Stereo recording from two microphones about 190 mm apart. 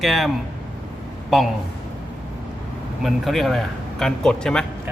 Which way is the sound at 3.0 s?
Centre (ahead or behind).